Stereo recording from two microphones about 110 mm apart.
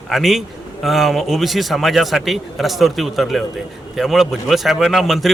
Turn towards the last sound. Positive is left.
turn(degrees=0)  # may be behind; listen again after turning